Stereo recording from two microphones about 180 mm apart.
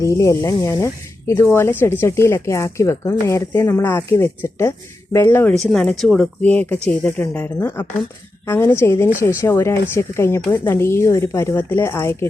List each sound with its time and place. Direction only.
0.0 s speech: 15° left (ahead or behind)
5.5 s speech: centre (ahead or behind)